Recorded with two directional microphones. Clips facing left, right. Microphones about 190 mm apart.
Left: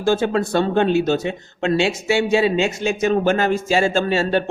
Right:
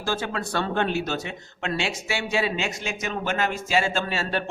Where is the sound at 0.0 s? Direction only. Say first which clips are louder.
Left 10 dB; 25° left (ahead or behind).